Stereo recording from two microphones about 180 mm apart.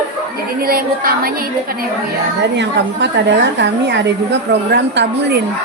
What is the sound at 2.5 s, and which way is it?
A woman's voice, 80° right.